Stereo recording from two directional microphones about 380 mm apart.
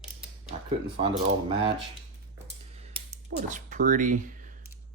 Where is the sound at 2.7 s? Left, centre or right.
Centre.